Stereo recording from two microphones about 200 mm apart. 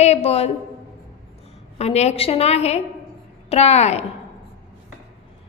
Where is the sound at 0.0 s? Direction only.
30° left (ahead or behind).